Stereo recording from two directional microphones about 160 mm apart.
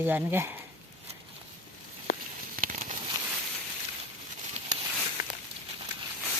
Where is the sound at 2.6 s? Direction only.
55° right (ahead or behind).